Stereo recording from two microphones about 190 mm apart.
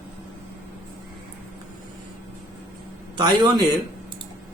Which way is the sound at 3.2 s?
20° right (ahead or behind).